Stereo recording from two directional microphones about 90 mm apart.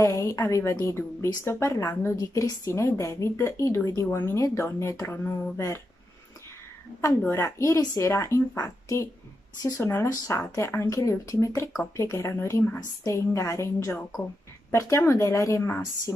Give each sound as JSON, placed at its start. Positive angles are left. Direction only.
{"t": 0.0, "sound": "a woman's voice", "side_deg": 35}
{"t": 7.2, "sound": "a woman's voice", "side_deg": 30}